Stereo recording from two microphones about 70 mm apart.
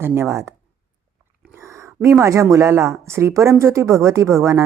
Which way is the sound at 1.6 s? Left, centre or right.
Right.